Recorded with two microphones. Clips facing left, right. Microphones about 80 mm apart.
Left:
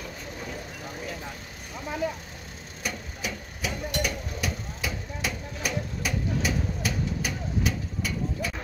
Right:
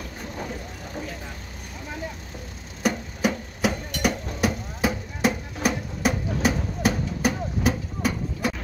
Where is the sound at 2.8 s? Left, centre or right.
Right.